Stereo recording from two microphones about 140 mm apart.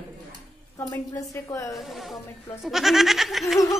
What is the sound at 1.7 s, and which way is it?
Goat, centre (ahead or behind).